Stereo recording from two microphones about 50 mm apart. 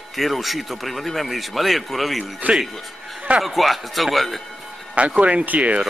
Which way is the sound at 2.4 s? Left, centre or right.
Right.